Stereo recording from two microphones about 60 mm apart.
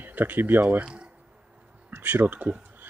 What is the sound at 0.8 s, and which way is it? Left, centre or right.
Speech, centre.